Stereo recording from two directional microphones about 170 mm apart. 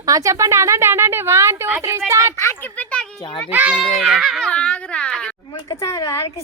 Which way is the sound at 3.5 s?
10° right (ahead or behind).